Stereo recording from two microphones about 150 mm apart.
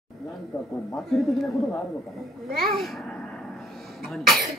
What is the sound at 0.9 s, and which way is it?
Speech, centre (ahead or behind).